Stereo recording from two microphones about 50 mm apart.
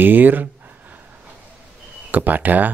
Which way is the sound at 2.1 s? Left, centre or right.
Right.